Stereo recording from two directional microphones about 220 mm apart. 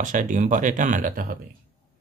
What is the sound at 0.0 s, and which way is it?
Speech, 35° right (ahead or behind).